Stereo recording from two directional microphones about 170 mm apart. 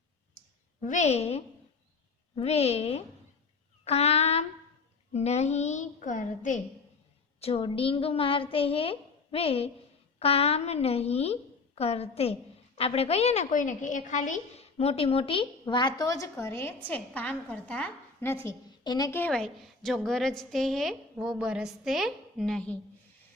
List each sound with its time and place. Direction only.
0.8 s a woman's voice: 45° left (ahead or behind)
7.3 s a woman's voice: 35° left (ahead or behind); by 22.8 s 5° left (ahead or behind)